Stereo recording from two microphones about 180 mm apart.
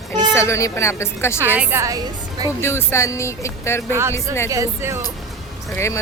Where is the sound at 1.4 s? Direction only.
10° right (ahead or behind).